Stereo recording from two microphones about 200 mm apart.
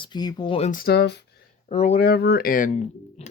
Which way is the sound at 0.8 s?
55° left (ahead or behind).